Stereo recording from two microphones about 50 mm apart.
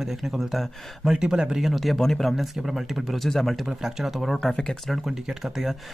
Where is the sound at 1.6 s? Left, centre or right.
Centre.